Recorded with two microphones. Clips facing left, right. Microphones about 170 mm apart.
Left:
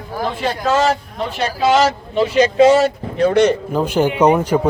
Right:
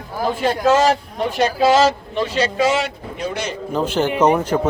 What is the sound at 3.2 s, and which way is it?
Speech, 65° left (ahead or behind).